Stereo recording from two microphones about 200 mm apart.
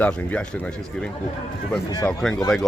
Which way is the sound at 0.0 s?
5° left (ahead or behind).